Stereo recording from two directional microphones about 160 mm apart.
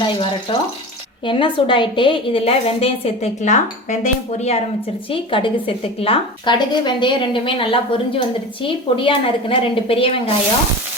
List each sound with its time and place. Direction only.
0.0 s a woman's voice: 30° left (ahead or behind)
5.1 s a woman's voice: 35° left (ahead or behind)